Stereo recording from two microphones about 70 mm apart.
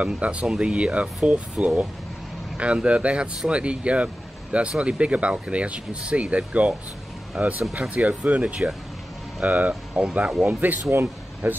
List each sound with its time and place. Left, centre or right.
0.0 s speech: centre